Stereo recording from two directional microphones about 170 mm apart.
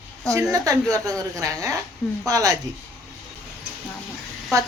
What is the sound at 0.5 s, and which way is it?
A woman's voice, 20° right (ahead or behind).